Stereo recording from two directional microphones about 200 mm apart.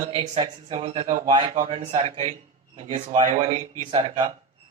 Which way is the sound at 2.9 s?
40° right (ahead or behind).